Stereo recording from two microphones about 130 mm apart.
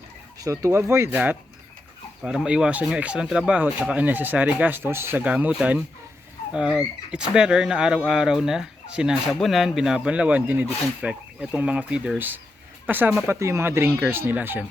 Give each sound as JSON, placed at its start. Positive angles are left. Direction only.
{"t": 0.3, "sound": "speech", "side_deg": -25}